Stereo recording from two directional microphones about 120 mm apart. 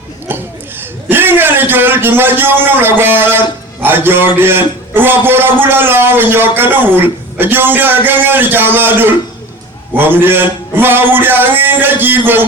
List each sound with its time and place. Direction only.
1.0 s a man's voice: 15° right (ahead or behind)